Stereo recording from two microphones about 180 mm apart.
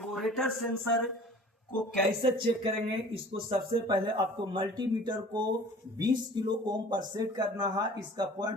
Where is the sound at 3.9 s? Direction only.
25° right (ahead or behind).